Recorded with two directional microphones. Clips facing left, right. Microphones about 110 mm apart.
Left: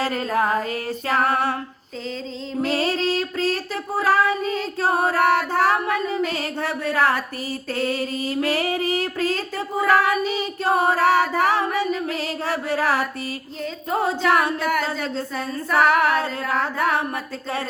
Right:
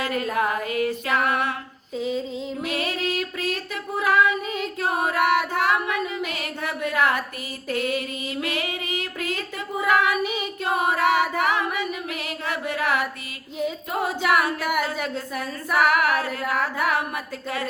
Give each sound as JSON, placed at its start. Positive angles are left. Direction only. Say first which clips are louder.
{"t": 0.0, "sound": "female singing", "louder": "left 2 dB", "side_deg": 30}
{"t": 2.0, "sound": "music", "louder": "right 2 dB", "side_deg": -10}
{"t": 2.6, "sound": "child singing", "louder": "left 6 dB", "side_deg": 30}
{"t": 4.8, "sound": "female singing", "louder": "left 3 dB", "side_deg": 30}
{"t": 13.9, "sound": "singing", "louder": "left 3 dB", "side_deg": 30}
{"t": 14.6, "sound": "music", "louder": "left 2 dB", "side_deg": -15}
{"t": 14.8, "sound": "singing", "louder": "left 2 dB", "side_deg": 30}